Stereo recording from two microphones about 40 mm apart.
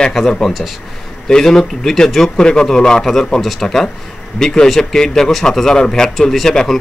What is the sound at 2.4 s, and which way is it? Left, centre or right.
A man's voice, centre.